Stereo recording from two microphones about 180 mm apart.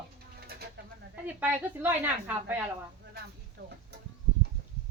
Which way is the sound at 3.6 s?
60° right (ahead or behind).